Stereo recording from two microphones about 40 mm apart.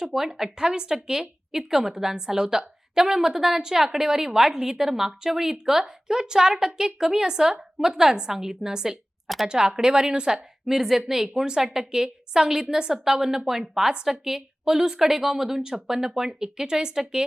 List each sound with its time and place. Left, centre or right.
0.0 s a woman's voice: centre